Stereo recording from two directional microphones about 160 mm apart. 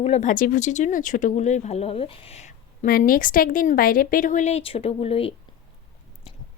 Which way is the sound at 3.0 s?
60° left (ahead or behind).